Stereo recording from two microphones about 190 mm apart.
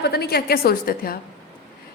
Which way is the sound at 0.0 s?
55° left (ahead or behind).